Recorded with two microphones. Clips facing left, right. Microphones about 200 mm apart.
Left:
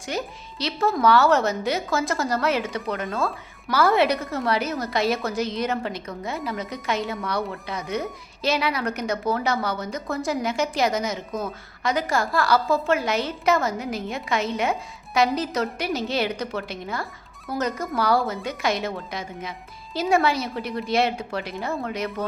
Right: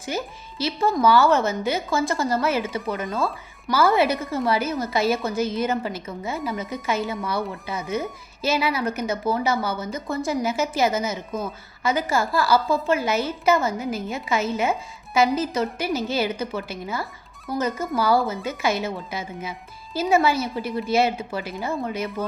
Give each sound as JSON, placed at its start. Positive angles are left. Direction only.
{"t": 0.0, "sound": "a woman's voice", "side_deg": -5}